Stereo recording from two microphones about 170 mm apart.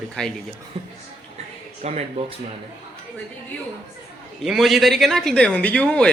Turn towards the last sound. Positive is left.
turn(degrees=5)  # may be behind; listen again after turning